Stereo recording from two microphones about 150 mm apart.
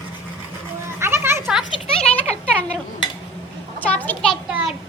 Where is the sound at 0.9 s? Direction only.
15° right (ahead or behind).